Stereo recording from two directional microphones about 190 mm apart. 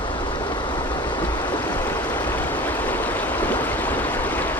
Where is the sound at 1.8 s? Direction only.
10° left (ahead or behind).